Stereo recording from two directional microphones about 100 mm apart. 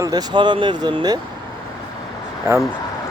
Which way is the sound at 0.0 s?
40° right (ahead or behind).